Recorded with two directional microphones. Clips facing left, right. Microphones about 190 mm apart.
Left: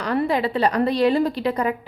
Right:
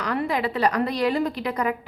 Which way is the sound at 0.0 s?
30° left (ahead or behind).